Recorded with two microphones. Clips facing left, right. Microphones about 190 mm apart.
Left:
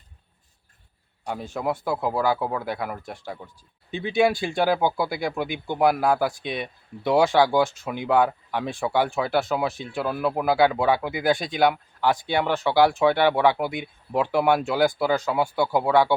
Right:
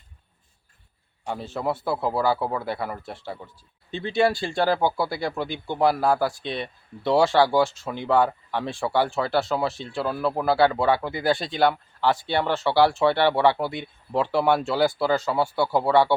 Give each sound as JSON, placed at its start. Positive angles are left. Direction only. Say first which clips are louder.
{"t": 1.3, "sound": "speech", "louder": "even", "side_deg": 10}
{"t": 2.4, "sound": "speech", "louder": "even", "side_deg": 0}
{"t": 3.9, "sound": "speech", "louder": "left 1 dB", "side_deg": 15}
{"t": 6.0, "sound": "speech", "louder": "even", "side_deg": 0}
{"t": 6.4, "sound": "speech", "louder": "even", "side_deg": 15}
{"t": 7.4, "sound": "speech", "louder": "even", "side_deg": 0}
{"t": 7.7, "sound": "speech", "louder": "even", "side_deg": 15}
{"t": 9.0, "sound": "speech", "louder": "even", "side_deg": 0}
{"t": 9.2, "sound": "speech", "louder": "even", "side_deg": 15}
{"t": 9.5, "sound": "speech", "louder": "even", "side_deg": 0}
{"t": 9.7, "sound": "speech", "louder": "even", "side_deg": 15}
{"t": 15.1, "sound": "speech", "louder": "even", "side_deg": 0}
{"t": 15.4, "sound": "speech", "louder": "even", "side_deg": 15}